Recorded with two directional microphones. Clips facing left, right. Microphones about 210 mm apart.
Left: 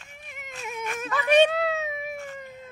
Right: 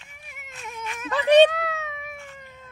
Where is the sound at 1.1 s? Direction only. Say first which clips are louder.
Right 4 dB; 30° right (ahead or behind).